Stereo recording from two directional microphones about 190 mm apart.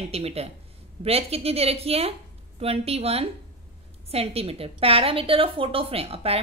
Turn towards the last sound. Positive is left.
turn(degrees=-30)  # may be behind; listen again after turning